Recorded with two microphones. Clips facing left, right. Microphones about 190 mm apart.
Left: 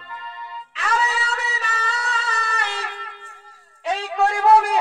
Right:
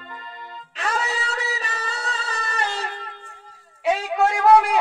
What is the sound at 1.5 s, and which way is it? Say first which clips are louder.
Music: left 2 dB; 35° right (ahead or behind).